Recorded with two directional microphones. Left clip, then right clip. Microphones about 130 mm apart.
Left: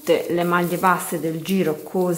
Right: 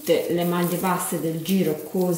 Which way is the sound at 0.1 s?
20° left (ahead or behind).